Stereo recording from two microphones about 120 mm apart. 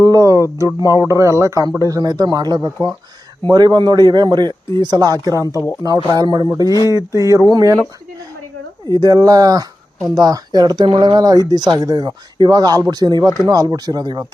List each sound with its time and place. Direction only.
0.0 s speech: 30° right (ahead or behind)
6.8 s speech: 25° right (ahead or behind)
8.9 s speech: 30° right (ahead or behind)